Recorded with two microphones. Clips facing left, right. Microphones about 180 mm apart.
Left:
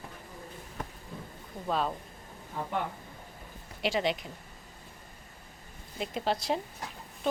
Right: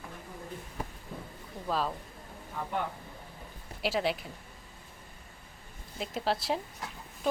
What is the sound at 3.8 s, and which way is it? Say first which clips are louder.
Speech: left 1 dB; 5° right (ahead or behind).